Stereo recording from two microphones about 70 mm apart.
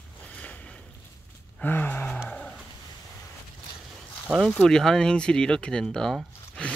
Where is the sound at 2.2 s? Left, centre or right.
Centre.